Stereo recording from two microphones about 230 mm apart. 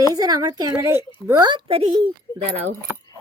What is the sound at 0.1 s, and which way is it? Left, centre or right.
A woman's voice, centre.